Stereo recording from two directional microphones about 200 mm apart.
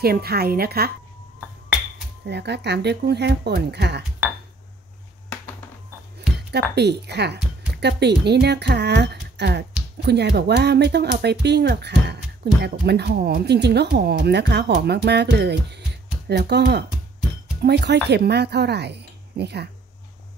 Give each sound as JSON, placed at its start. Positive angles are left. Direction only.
{"t": 0.0, "sound": "a woman's voice", "side_deg": -50}
{"t": 2.2, "sound": "speech", "side_deg": -55}
{"t": 6.5, "sound": "speech", "side_deg": -55}